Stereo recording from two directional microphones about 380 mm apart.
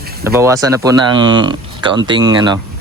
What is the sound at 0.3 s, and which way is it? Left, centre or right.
Speech, centre.